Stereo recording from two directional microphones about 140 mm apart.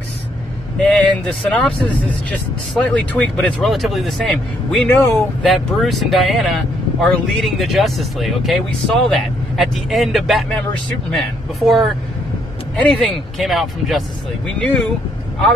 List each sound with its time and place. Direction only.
0.7 s speech: 5° left (ahead or behind)
2.8 s speech: 10° left (ahead or behind)
4.8 s speech: 15° left (ahead or behind)
5.4 s speech: centre (ahead or behind)